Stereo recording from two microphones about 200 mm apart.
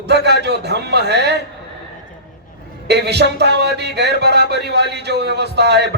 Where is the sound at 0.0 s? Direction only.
55° right (ahead or behind).